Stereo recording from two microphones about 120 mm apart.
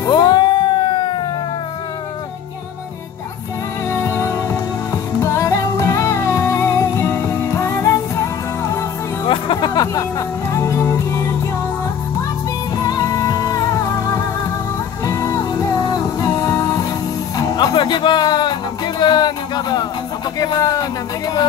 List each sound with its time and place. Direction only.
0.1 s cat: 35° left (ahead or behind)
3.9 s music: 20° left (ahead or behind)
9.3 s music: 40° left (ahead or behind); by 11.3 s 20° left (ahead or behind)
12.7 s music: 30° left (ahead or behind)
20.3 s a sound: 35° left (ahead or behind)